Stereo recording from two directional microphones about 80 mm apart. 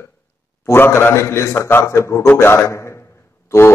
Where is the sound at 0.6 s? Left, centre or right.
Left.